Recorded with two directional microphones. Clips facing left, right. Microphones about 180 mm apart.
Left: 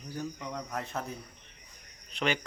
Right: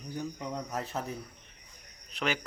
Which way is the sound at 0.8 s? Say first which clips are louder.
Right 1 dB; 5° right (ahead or behind).